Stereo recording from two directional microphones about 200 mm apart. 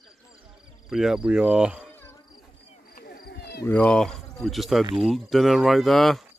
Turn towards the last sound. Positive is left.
turn(degrees=0)  # may be behind; listen again after turning